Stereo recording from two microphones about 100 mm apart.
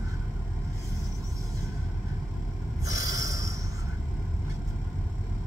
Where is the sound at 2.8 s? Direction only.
35° right (ahead or behind).